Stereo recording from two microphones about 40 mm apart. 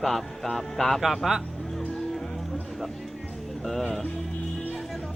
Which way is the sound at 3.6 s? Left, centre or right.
Centre.